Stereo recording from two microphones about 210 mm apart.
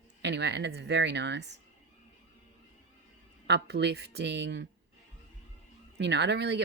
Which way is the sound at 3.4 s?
50° right (ahead or behind).